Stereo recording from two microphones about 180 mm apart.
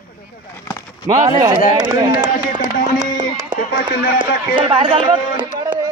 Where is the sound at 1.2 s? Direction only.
20° right (ahead or behind).